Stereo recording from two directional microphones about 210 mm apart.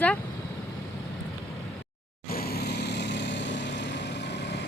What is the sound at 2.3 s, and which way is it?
Vehicle, 45° left (ahead or behind).